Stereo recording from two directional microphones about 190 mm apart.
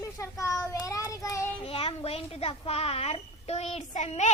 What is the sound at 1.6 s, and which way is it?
Speech, 30° left (ahead or behind).